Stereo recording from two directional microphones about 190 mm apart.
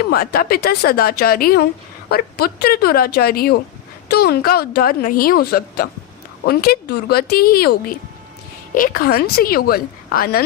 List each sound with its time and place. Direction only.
0.1 s a woman's voice: 55° left (ahead or behind)